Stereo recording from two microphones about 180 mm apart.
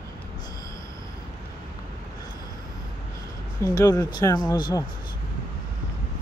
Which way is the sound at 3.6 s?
15° left (ahead or behind).